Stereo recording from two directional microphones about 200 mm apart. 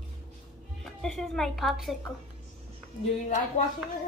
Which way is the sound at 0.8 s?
Centre (ahead or behind).